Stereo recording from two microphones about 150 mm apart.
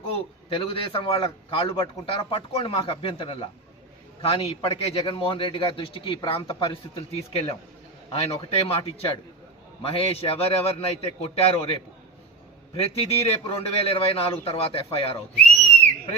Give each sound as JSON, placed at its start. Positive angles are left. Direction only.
{"t": 0.5, "sound": "a man's voice", "side_deg": 35}